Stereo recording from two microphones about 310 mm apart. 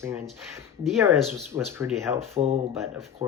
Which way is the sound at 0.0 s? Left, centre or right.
Centre.